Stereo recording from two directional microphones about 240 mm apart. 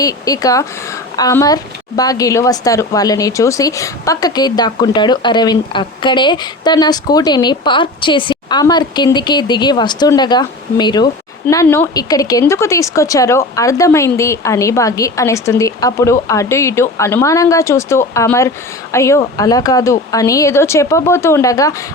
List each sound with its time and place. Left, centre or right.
0.0 s a woman's voice: centre